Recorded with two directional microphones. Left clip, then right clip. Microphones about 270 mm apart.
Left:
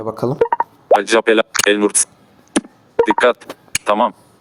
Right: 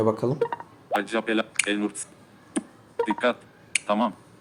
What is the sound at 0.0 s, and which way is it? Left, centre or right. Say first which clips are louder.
Speech: left 3 dB; left.